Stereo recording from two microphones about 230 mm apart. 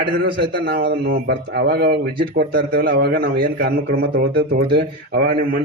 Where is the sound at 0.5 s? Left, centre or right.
Right.